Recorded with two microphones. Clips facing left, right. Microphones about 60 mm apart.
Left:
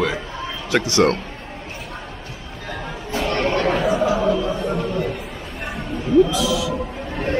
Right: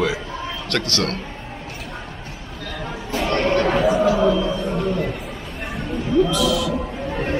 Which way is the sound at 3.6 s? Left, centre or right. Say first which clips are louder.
Right 1 dB; centre.